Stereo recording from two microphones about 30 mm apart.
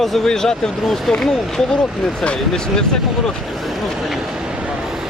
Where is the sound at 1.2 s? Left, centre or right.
Left.